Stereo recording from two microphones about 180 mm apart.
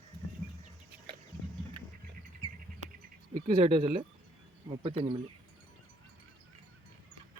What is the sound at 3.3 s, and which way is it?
Speech, 50° right (ahead or behind).